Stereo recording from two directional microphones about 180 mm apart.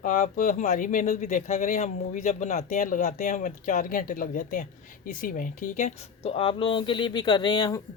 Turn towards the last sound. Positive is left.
turn(degrees=20)  # may be behind; listen again after turning